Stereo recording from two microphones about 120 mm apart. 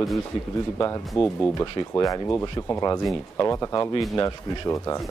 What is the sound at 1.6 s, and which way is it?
Speech, 30° left (ahead or behind).